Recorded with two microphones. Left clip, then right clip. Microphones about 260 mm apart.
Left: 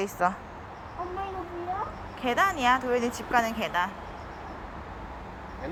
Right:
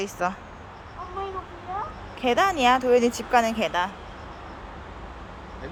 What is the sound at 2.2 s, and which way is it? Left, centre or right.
Speech, centre.